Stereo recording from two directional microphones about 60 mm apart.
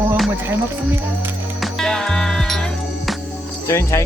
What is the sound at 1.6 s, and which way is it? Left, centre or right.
Music, centre.